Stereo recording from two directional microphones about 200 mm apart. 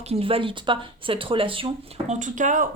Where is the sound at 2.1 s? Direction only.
40° right (ahead or behind).